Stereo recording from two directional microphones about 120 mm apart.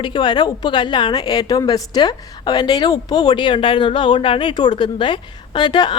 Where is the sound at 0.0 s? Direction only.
40° left (ahead or behind).